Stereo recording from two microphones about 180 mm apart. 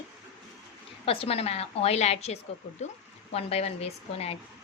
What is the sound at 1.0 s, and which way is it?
A woman's voice, 30° left (ahead or behind).